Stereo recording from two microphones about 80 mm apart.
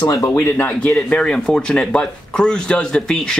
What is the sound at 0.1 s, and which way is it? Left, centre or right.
Speech, left.